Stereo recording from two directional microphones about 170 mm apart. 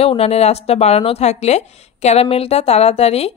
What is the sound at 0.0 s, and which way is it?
A woman's voice, 35° left (ahead or behind).